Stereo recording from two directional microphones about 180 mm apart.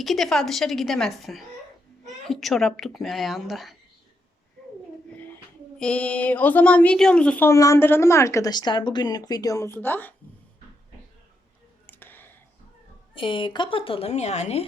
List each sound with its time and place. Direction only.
0.0 s speech: centre (ahead or behind)
5.8 s speech: 5° left (ahead or behind)
11.9 s clicking: 10° left (ahead or behind)
13.1 s a woman's voice: 30° left (ahead or behind)